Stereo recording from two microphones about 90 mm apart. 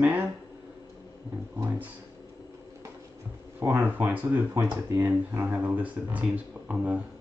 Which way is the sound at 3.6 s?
25° right (ahead or behind).